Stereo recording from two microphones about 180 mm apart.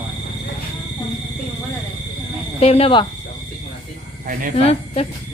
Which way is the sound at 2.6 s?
35° left (ahead or behind).